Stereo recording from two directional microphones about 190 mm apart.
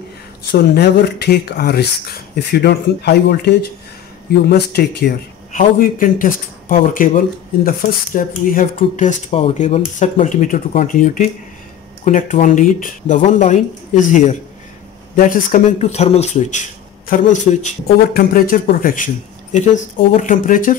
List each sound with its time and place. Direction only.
0.5 s speech: 60° left (ahead or behind)
8.7 s speech: 35° left (ahead or behind)
15.8 s speech: 35° left (ahead or behind)